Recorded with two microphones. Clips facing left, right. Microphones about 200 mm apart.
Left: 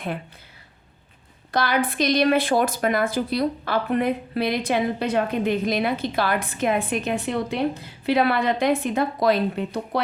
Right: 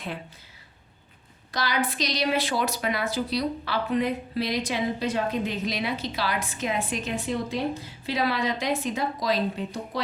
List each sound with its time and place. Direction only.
1.5 s speech: 55° left (ahead or behind)